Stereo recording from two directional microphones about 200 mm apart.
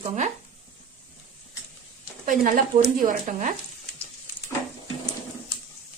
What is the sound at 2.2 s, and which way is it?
Speech, 40° right (ahead or behind).